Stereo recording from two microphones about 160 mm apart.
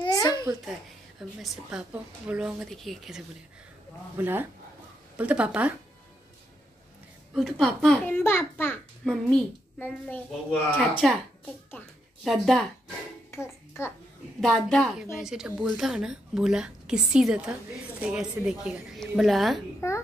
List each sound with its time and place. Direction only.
0.0 s babbling: 20° left (ahead or behind)
1.4 s a woman's voice: 5° right (ahead or behind)
4.2 s speech: 15° right (ahead or behind)
7.3 s a child's voice: centre (ahead or behind); by 8.7 s 15° left (ahead or behind)
9.0 s a child's voice: 5° left (ahead or behind)
11.8 s a child's voice: 10° left (ahead or behind)
13.3 s a child's voice: 15° left (ahead or behind)
14.4 s a woman's voice: centre (ahead or behind)
19.8 s a child's voice: 20° left (ahead or behind)